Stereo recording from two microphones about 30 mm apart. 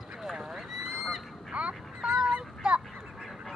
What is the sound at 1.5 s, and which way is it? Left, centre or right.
Quack, right.